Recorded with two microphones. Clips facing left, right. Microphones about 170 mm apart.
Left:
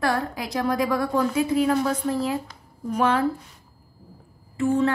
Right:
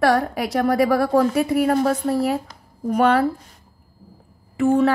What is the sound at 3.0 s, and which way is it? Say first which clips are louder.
Speech: right 4 dB; 70° right (ahead or behind).